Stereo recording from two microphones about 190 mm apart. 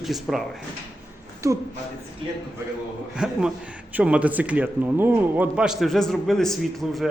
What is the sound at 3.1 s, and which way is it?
Speech, 5° right (ahead or behind).